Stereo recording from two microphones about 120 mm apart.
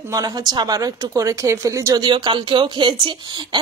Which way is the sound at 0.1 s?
30° right (ahead or behind).